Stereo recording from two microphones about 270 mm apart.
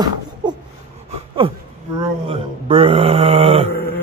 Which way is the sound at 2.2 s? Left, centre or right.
Centre.